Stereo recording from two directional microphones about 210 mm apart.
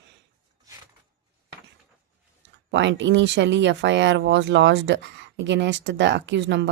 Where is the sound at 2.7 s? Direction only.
60° right (ahead or behind).